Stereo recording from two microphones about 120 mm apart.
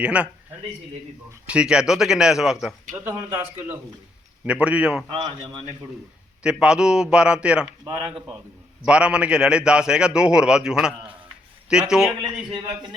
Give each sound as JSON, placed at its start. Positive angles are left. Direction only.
{"t": 0.0, "sound": "a man's voice", "side_deg": -10}
{"t": 1.5, "sound": "a man's voice", "side_deg": -5}
{"t": 3.0, "sound": "a man's voice", "side_deg": -15}
{"t": 5.1, "sound": "speech", "side_deg": -40}
{"t": 6.4, "sound": "a man's voice", "side_deg": -10}
{"t": 8.8, "sound": "a man's voice", "side_deg": -10}